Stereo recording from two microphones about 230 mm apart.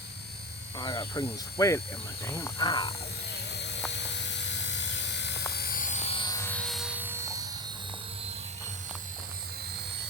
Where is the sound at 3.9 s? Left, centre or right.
Left; by 7.4 s centre.